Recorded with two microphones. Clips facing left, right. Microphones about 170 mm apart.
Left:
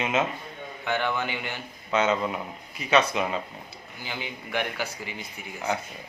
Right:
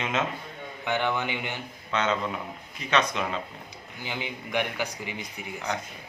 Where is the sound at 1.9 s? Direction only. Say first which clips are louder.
Left 3 dB; 10° left (ahead or behind).